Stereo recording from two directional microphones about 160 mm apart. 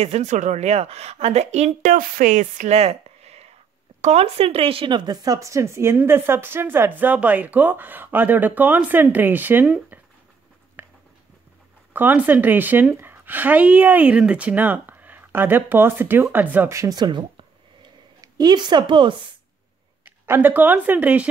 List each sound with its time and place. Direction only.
0.0 s a woman's voice: 45° right (ahead or behind); by 9.9 s 10° right (ahead or behind)
10.8 s a sound: 15° right (ahead or behind)
11.9 s a woman's voice: 10° right (ahead or behind); by 19.1 s 30° right (ahead or behind)
20.1 s speech: 10° right (ahead or behind)